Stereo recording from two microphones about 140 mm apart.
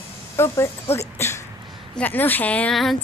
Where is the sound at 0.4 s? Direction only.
20° left (ahead or behind).